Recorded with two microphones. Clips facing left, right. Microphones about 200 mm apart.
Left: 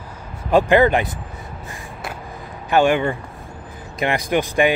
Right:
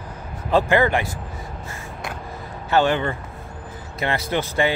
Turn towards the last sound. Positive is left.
turn(degrees=15)  # may be behind; listen again after turning